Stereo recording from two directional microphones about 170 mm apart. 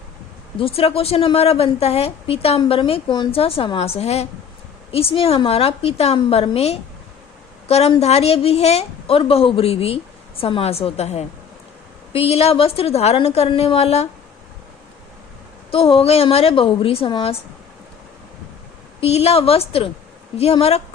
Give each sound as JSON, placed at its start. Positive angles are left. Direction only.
{"t": 0.6, "sound": "a woman's voice", "side_deg": 35}
{"t": 15.7, "sound": "a woman's voice", "side_deg": 35}
{"t": 18.9, "sound": "a woman's voice", "side_deg": 35}